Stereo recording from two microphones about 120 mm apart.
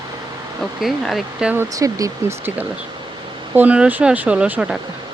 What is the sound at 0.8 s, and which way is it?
Speech, centre (ahead or behind).